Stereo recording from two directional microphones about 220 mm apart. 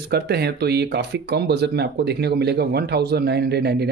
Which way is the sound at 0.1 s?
45° right (ahead or behind).